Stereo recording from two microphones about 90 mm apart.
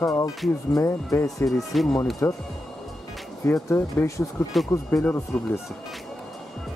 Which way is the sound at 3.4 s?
30° left (ahead or behind).